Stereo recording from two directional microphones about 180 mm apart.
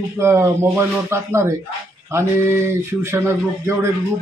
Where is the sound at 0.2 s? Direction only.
15° right (ahead or behind).